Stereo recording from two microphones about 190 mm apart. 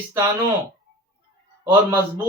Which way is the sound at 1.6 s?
10° right (ahead or behind).